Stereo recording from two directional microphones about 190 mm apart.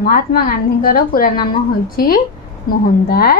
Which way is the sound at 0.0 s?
50° left (ahead or behind).